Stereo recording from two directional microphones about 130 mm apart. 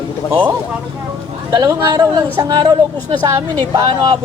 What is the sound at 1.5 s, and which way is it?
A woman's voice, 30° right (ahead or behind).